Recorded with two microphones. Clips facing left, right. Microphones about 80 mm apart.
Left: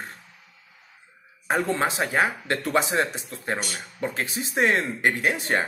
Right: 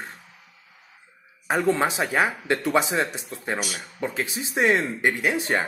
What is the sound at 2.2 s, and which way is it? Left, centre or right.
Speech, centre.